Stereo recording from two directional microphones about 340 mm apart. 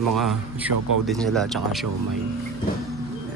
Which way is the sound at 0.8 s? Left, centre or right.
Right.